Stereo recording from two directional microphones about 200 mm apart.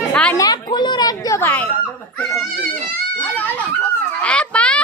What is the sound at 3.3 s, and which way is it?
Speech, 10° left (ahead or behind).